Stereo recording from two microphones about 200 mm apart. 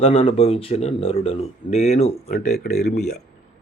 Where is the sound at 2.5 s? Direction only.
50° left (ahead or behind).